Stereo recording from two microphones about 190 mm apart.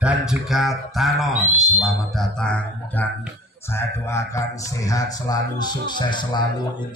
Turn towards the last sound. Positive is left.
turn(degrees=25)  # may be behind; listen again after turning